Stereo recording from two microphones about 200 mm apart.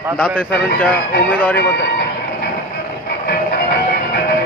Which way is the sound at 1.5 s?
55° left (ahead or behind).